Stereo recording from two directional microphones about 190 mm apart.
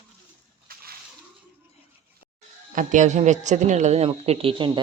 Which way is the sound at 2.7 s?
40° right (ahead or behind).